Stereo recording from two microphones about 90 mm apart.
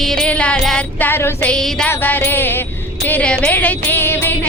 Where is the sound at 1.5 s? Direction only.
10° left (ahead or behind).